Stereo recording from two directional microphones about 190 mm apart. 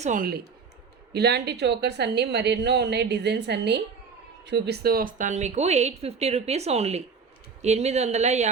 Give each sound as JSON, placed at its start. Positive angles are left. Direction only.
{"t": 0.0, "sound": "speech", "side_deg": -45}
{"t": 1.1, "sound": "a woman's voice", "side_deg": -60}